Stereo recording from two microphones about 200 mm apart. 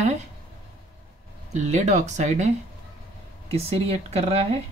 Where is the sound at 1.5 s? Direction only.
35° right (ahead or behind).